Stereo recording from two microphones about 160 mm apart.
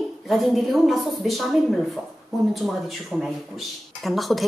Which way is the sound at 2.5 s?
Centre (ahead or behind).